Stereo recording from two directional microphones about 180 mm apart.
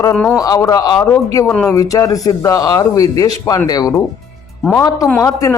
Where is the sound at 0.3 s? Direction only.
20° left (ahead or behind).